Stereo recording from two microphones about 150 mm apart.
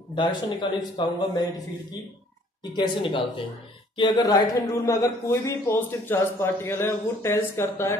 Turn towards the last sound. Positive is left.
turn(degrees=15)  # may be behind; listen again after turning